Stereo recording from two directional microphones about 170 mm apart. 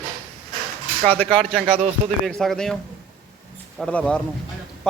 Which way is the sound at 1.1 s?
10° left (ahead or behind).